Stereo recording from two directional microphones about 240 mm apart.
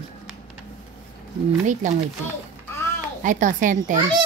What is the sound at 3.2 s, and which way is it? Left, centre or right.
Speech, right.